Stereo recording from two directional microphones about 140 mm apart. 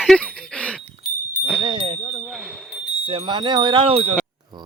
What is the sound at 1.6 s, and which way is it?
Wind chime, 40° right (ahead or behind).